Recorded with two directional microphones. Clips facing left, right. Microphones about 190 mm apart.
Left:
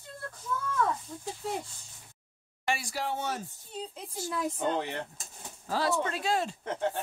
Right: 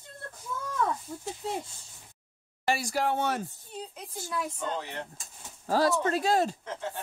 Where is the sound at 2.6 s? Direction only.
40° right (ahead or behind); by 3.4 s 60° right (ahead or behind).